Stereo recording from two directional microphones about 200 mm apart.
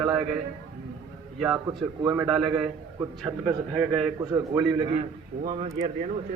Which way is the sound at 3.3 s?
15° right (ahead or behind).